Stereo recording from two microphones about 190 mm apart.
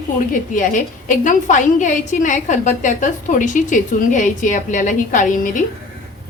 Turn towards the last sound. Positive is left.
turn(degrees=45)  # may be behind; listen again after turning